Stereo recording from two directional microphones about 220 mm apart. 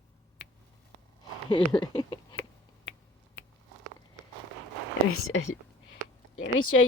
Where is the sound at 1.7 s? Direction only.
20° left (ahead or behind).